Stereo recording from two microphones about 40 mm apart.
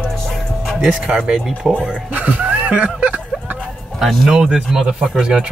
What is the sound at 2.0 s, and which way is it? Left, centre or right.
Speech, right.